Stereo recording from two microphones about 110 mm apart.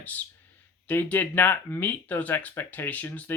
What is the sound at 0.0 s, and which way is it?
Speech, 15° left (ahead or behind).